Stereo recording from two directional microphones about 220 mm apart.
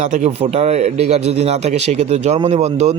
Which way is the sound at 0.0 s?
35° right (ahead or behind).